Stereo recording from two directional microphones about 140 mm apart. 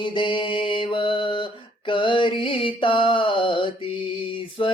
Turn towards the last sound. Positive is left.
turn(degrees=40)  # may be behind; listen again after turning